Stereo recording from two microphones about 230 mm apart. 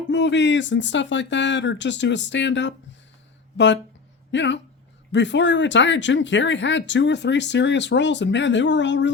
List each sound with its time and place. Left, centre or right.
0.1 s speech: left
4.3 s speech: left